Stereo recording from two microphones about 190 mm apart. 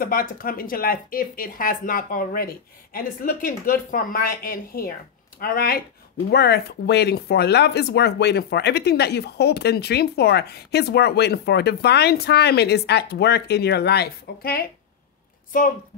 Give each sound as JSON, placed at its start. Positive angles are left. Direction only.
{"t": 0.0, "sound": "speech", "side_deg": 50}